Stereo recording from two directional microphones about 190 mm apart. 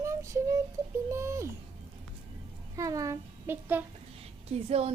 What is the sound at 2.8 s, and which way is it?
Speech, 15° right (ahead or behind).